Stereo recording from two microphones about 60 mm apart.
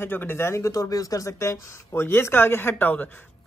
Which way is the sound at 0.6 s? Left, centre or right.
Left.